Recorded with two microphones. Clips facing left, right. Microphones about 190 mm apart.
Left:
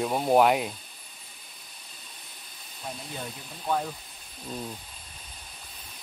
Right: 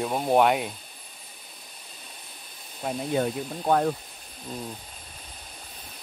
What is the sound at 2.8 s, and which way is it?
Speech, 65° right (ahead or behind).